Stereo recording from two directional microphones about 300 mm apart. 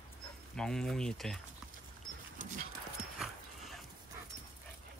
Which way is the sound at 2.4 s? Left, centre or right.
Right.